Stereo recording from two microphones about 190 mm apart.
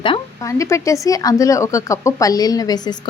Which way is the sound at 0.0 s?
20° left (ahead or behind).